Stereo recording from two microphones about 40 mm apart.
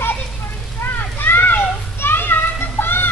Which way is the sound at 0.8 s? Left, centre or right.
Left.